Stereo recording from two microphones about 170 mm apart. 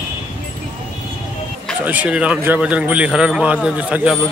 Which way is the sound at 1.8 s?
10° right (ahead or behind).